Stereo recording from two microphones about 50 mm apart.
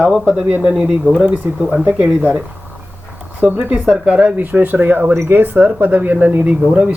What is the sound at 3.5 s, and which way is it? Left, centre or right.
Speech, right.